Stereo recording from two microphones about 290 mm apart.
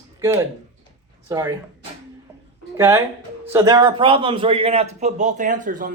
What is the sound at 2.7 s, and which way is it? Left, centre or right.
A man's voice, centre.